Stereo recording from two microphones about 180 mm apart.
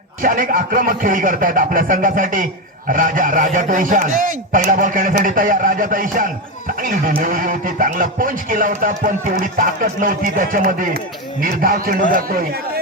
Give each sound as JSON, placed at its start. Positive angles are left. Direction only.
{"t": 0.2, "sound": "a man's voice", "side_deg": -50}